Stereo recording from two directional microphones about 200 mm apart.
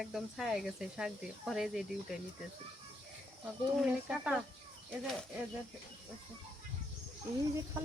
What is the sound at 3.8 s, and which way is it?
Speech, 5° right (ahead or behind).